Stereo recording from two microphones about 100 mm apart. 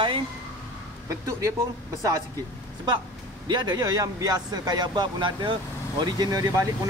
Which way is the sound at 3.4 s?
45° right (ahead or behind).